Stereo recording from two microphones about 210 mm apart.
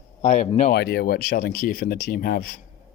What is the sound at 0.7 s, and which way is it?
Speech, 50° left (ahead or behind).